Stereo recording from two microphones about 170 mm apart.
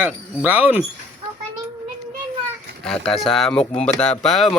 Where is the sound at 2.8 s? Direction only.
Centre (ahead or behind).